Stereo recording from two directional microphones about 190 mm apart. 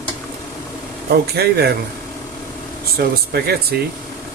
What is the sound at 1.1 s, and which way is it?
Speech, 55° right (ahead or behind).